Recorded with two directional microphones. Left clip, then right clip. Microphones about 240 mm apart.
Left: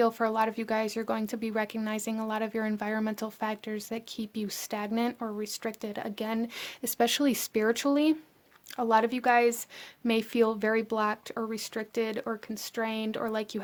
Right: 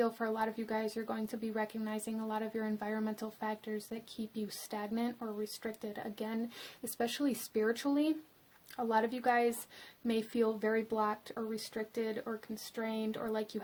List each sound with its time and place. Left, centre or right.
0.0 s speech: left